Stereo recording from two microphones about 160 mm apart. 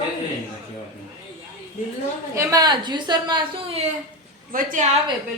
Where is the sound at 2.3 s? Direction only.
20° right (ahead or behind).